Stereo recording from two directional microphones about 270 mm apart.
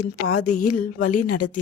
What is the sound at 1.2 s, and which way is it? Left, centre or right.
Speech, left.